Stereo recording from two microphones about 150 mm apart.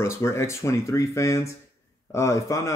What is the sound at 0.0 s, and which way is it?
Speech, 15° left (ahead or behind).